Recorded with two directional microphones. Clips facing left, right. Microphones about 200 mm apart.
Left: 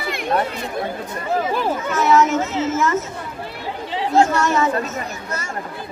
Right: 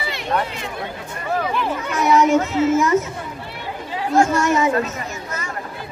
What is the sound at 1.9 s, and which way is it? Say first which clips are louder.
Speech: even; 15° right (ahead or behind).